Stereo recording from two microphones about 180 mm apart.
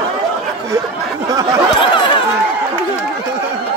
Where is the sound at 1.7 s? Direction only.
30° left (ahead or behind).